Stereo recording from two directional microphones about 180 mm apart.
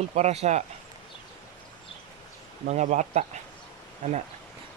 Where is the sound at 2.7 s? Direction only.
40° right (ahead or behind).